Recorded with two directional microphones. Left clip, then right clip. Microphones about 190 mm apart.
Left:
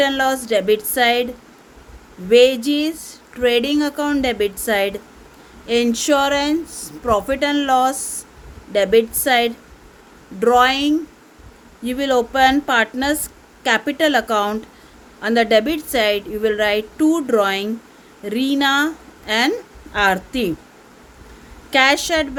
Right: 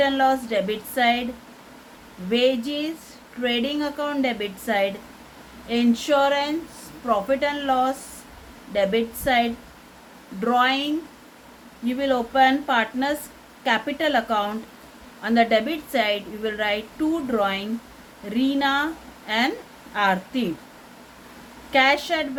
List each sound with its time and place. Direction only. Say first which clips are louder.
0.0 s a woman's voice: left 2 dB; 70° left (ahead or behind)
2.3 s a woman's voice: left 9 dB; 70° left (ahead or behind)
21.7 s a woman's voice: left 4 dB; 70° left (ahead or behind)